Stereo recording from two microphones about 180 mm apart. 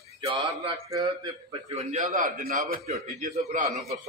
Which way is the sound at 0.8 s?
20° right (ahead or behind).